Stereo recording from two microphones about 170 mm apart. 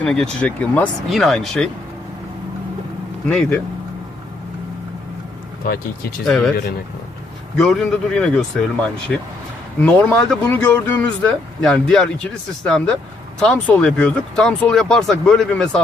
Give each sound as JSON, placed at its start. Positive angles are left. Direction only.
{"t": 0.0, "sound": "speech", "side_deg": 5}
{"t": 3.2, "sound": "speech", "side_deg": 5}
{"t": 5.6, "sound": "speech", "side_deg": 60}
{"t": 6.2, "sound": "speech", "side_deg": 5}
{"t": 7.6, "sound": "speech", "side_deg": 0}